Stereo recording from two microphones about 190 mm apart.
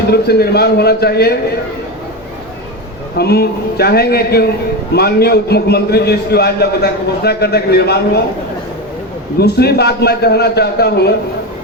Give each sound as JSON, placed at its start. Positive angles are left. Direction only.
{"t": 0.1, "sound": "a man's voice", "side_deg": 55}
{"t": 3.2, "sound": "a man's voice", "side_deg": 55}
{"t": 9.4, "sound": "a man's voice", "side_deg": 60}